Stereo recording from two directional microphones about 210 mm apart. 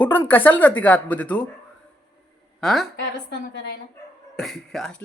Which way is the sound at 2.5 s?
Centre (ahead or behind).